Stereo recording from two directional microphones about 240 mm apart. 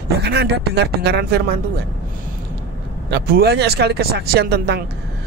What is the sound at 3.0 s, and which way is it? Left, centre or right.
Speech, right.